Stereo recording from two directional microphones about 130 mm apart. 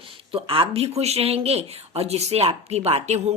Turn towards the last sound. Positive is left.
turn(degrees=-55)  # may be behind; listen again after turning